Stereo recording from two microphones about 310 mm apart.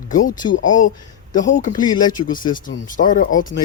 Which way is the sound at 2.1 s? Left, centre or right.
Left.